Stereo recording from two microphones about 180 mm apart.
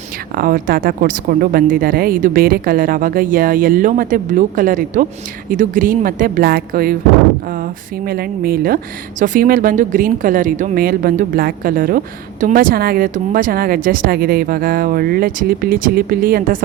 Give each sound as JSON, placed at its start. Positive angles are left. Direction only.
{"t": 0.3, "sound": "speech", "side_deg": -50}